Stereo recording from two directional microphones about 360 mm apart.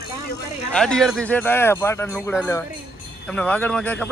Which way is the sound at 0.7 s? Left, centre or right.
Centre.